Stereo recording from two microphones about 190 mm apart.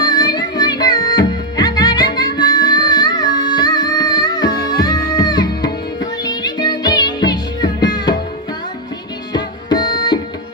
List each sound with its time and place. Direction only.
0.0 s music: 20° left (ahead or behind)
9.3 s music: 20° left (ahead or behind)